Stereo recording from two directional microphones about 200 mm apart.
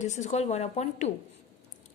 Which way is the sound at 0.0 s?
35° left (ahead or behind).